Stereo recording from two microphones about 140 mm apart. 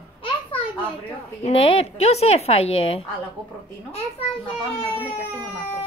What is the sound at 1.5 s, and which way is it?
Speech, 45° left (ahead or behind).